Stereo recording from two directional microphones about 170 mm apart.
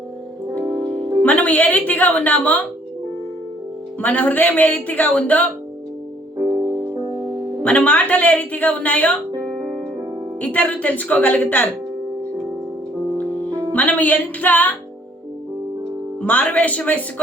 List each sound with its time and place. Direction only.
0.6 s music: 20° right (ahead or behind)
1.2 s music: 10° left (ahead or behind)
1.9 s a woman's voice: 10° left (ahead or behind)
4.0 s a woman's voice: 10° left (ahead or behind)
6.4 s music: 25° right (ahead or behind)
7.6 s a woman's voice: 5° left (ahead or behind)
10.4 s a woman's voice: 10° left (ahead or behind)
13.7 s a woman's voice: 10° left (ahead or behind)
16.2 s a woman's voice: 10° left (ahead or behind)